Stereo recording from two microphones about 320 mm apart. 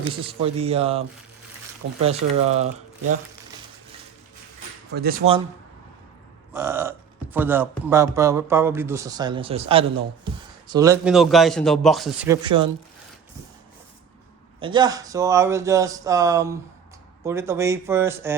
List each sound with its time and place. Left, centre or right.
0.1 s speech: centre
4.9 s speech: right
6.5 s a man's voice: centre
14.6 s speech: centre